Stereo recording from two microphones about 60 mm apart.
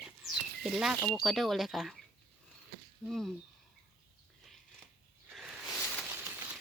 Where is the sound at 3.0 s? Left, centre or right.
Centre.